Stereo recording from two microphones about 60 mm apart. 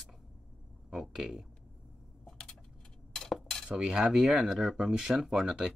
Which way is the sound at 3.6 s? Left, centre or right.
Centre.